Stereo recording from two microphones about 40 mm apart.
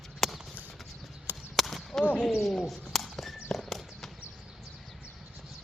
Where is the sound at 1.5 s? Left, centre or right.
Centre.